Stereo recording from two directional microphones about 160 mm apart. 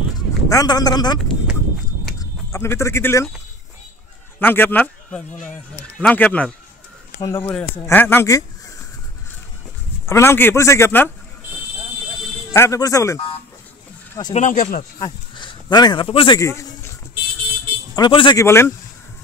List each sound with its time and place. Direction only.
0.5 s speech: 25° left (ahead or behind)
2.5 s speech: 15° left (ahead or behind)
4.4 s speech: 10° left (ahead or behind)
7.2 s speech: 20° left (ahead or behind)
10.0 s speech: 15° left (ahead or behind)
12.5 s speech: 20° left (ahead or behind)
14.3 s speech: 55° left (ahead or behind)
15.0 s speech: 25° left (ahead or behind)
16.3 s speech: 20° left (ahead or behind)
17.9 s speech: 30° left (ahead or behind)
18.4 s speech: 15° left (ahead or behind)